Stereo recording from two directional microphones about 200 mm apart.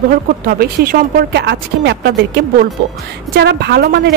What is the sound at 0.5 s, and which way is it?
A woman's voice, 45° right (ahead or behind).